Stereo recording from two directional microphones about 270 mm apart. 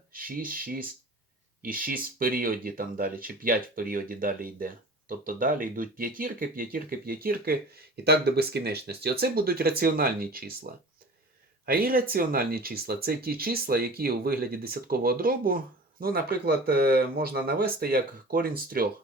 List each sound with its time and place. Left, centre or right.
0.1 s speech: right
11.6 s speech: right